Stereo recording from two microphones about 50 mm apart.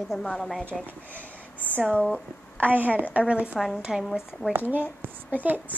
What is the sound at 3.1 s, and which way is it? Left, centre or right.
Speech, right.